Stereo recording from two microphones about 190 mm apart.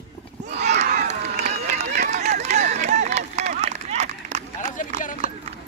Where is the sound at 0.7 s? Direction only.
40° right (ahead or behind).